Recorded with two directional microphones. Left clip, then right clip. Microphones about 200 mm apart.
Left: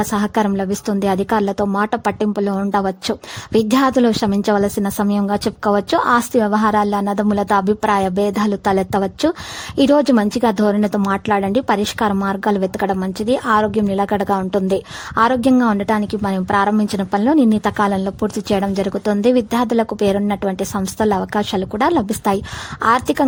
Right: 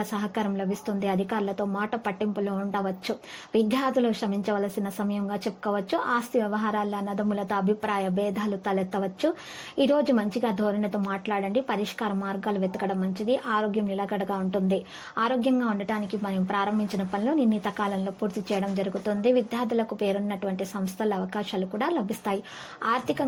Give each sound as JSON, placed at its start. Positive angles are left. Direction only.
{"t": 0.0, "sound": "a woman's voice", "side_deg": 45}